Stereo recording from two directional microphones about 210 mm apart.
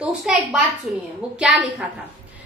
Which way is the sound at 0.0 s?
5° right (ahead or behind).